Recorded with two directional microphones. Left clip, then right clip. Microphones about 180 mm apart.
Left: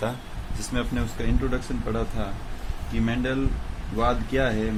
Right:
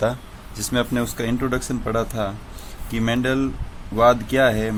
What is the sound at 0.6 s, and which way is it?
Speech, 60° right (ahead or behind).